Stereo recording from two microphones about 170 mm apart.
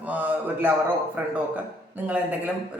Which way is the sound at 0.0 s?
10° right (ahead or behind).